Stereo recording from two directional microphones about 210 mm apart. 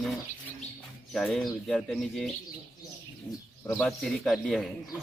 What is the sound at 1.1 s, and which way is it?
Speech, centre (ahead or behind).